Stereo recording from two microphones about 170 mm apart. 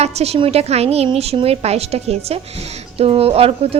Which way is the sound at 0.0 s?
40° right (ahead or behind).